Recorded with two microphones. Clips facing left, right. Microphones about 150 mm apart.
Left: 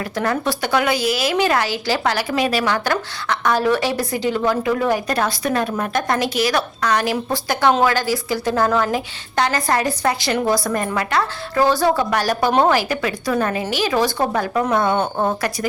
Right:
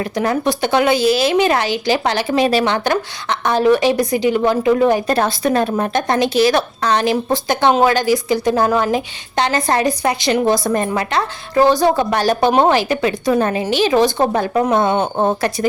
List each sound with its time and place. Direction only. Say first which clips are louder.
0.2 s a woman's voice: right 3 dB; 20° right (ahead or behind)